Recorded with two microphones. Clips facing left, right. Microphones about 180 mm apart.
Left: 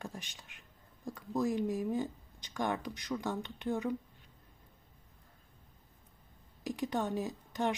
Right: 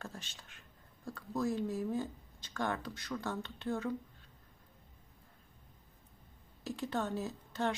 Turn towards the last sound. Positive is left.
turn(degrees=15)  # may be behind; listen again after turning